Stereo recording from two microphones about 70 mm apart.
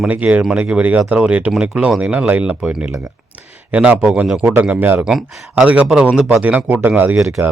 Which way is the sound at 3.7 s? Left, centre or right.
Centre.